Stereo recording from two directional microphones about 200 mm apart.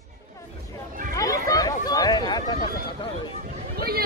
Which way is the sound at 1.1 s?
15° left (ahead or behind).